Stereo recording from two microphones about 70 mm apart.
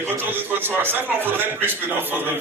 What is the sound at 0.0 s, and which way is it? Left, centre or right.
A man's voice, right.